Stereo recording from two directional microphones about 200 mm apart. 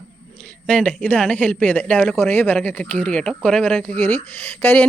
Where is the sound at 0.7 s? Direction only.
5° left (ahead or behind).